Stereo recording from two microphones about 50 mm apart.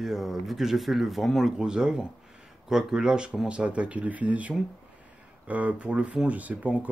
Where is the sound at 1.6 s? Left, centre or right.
Centre.